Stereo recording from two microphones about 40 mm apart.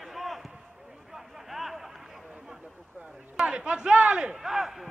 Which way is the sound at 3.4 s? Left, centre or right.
Right.